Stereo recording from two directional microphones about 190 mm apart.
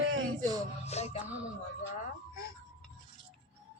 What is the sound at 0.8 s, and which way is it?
Music, 35° left (ahead or behind).